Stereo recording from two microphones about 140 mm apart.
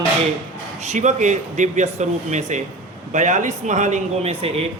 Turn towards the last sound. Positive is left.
turn(degrees=-45)  # may be behind; listen again after turning